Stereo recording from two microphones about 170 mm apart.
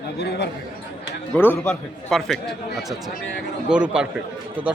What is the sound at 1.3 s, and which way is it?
A man's voice, 10° left (ahead or behind).